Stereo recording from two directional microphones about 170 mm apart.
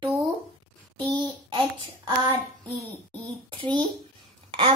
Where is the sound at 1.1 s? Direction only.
25° right (ahead or behind).